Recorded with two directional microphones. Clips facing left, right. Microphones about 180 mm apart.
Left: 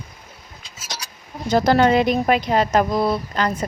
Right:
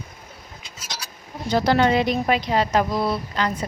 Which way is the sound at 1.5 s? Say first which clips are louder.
Left 3 dB; 45° left (ahead or behind).